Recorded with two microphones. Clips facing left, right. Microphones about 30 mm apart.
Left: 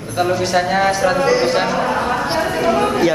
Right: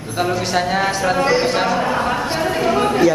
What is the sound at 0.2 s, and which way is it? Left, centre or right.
Speech, centre.